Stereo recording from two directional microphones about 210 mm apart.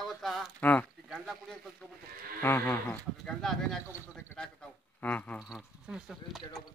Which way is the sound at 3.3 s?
Centre (ahead or behind).